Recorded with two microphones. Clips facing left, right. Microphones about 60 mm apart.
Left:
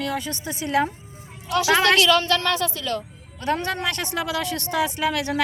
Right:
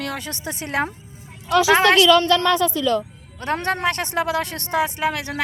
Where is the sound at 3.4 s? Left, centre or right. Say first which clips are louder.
Right 2 dB; right.